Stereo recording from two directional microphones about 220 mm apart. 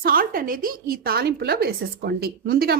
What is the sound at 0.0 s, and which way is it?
A woman's voice, 40° right (ahead or behind).